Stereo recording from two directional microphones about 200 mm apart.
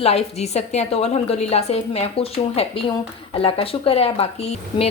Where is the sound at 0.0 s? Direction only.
30° left (ahead or behind).